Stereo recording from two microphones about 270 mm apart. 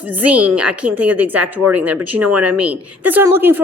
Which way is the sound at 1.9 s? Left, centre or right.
Right.